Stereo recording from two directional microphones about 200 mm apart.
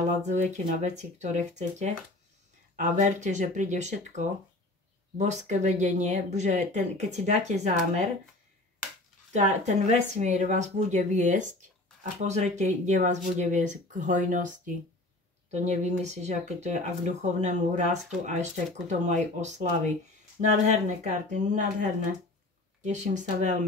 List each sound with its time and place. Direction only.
0.2 s speech: 35° right (ahead or behind)
9.3 s speech: 35° right (ahead or behind)
22.8 s speech: 35° right (ahead or behind)